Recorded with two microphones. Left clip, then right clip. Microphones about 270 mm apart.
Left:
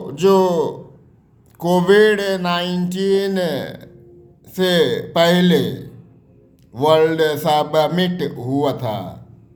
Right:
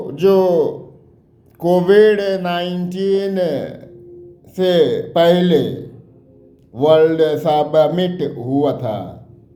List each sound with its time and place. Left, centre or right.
0.1 s mantra: centre